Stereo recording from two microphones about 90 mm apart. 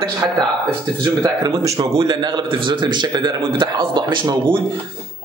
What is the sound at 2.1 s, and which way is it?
A man's voice, 55° right (ahead or behind).